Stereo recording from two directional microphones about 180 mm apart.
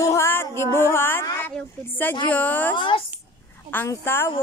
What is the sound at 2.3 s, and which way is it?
Speech, 10° left (ahead or behind).